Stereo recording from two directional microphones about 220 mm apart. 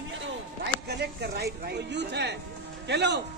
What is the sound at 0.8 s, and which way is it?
A man's voice, 50° right (ahead or behind).